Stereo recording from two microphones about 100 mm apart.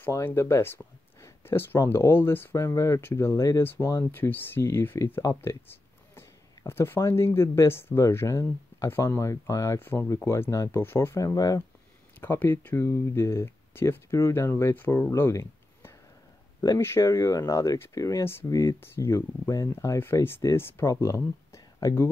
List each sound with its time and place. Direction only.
0.1 s speech: 25° left (ahead or behind)
1.2 s a sound: 25° left (ahead or behind)
1.9 s speech: 25° left (ahead or behind)
2.6 s speech: 30° left (ahead or behind)
10.8 s speech: 25° left (ahead or behind)
12.2 s speech: 20° left (ahead or behind)